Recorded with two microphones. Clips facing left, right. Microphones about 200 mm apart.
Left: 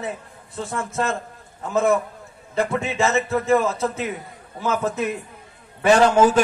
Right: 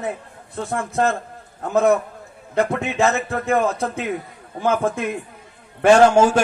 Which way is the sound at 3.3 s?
55° right (ahead or behind).